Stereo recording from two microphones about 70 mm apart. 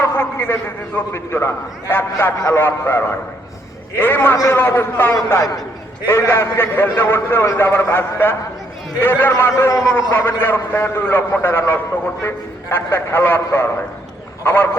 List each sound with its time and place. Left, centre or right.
0.0 s a man's voice: left
9.3 s a man's voice: left
10.1 s a man's voice: left